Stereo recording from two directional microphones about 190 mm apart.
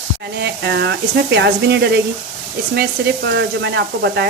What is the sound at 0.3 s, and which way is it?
Sizzle, 60° right (ahead or behind).